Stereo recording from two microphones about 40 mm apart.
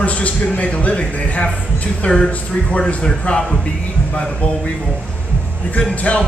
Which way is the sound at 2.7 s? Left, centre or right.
Left.